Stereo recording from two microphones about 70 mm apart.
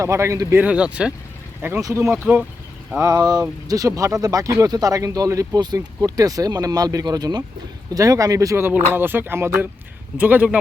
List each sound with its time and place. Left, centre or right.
0.0 s speech: right
0.6 s speech: centre
1.6 s music: right
2.2 s speech: centre
3.0 s speech: right
7.9 s speech: right
8.5 s music: right
10.2 s speech: right